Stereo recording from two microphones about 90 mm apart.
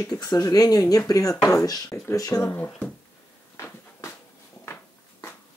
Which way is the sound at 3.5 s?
35° left (ahead or behind).